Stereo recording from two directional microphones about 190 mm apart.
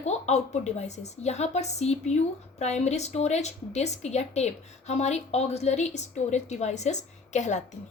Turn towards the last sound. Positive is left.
turn(degrees=40)  # may be behind; listen again after turning